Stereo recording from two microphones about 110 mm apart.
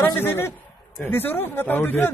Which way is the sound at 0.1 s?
20° left (ahead or behind).